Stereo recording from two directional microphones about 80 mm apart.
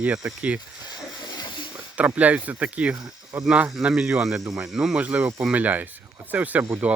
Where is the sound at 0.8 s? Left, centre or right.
Left.